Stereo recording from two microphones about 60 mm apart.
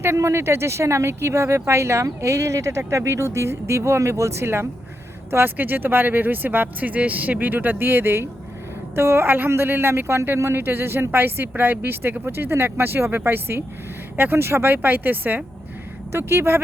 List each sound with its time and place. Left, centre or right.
0.2 s speech: right
5.3 s a man's voice: right
16.1 s speech: right